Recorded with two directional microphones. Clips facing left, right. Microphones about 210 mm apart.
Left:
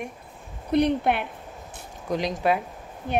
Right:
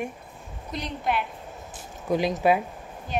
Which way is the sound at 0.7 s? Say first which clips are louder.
Left 8 dB; 60° left (ahead or behind).